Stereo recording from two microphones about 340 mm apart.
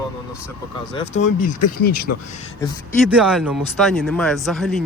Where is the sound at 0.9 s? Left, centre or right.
Centre.